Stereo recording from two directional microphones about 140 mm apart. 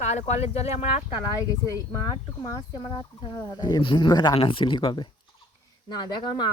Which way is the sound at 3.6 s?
30° left (ahead or behind).